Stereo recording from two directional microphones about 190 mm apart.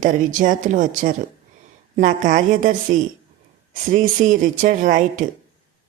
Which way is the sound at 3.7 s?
45° right (ahead or behind).